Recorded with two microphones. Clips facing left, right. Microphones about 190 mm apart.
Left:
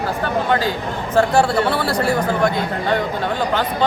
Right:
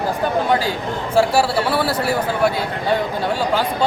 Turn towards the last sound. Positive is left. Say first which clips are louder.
# even
turn(degrees=-10)  # may be behind; listen again after turning